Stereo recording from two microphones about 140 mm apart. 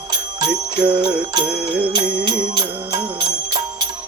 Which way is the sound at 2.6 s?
30° right (ahead or behind).